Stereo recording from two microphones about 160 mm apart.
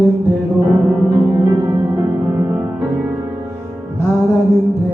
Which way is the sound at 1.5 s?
20° right (ahead or behind).